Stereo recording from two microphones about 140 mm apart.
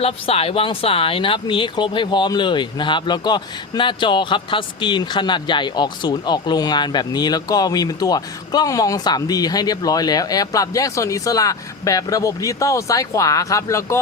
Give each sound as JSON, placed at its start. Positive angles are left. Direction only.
{"t": 0.0, "sound": "speech", "side_deg": 45}